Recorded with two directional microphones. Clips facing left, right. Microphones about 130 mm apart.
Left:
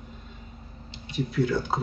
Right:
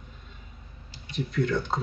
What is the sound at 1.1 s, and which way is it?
Speech, 5° left (ahead or behind).